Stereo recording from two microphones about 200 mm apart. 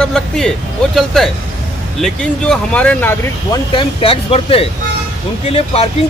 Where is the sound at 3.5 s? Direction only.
25° left (ahead or behind).